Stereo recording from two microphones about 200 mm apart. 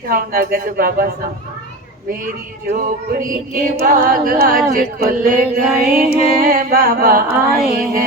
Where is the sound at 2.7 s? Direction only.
45° right (ahead or behind).